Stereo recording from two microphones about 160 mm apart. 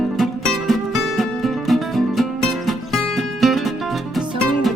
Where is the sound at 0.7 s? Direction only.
Centre (ahead or behind).